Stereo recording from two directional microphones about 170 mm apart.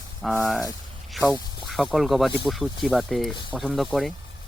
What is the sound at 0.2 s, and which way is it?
Speech, centre (ahead or behind).